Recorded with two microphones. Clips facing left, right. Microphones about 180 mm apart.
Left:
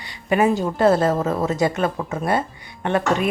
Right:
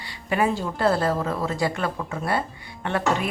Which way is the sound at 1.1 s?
40° left (ahead or behind).